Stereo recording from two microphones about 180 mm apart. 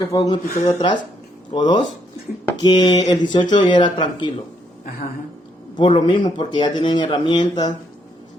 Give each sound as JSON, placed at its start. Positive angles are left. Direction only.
{"t": 0.0, "sound": "speech", "side_deg": 25}
{"t": 5.7, "sound": "speech", "side_deg": 25}